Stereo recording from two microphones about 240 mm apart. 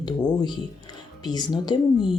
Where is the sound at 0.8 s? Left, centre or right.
Centre.